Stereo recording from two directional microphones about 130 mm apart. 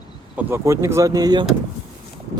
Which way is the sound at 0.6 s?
25° right (ahead or behind).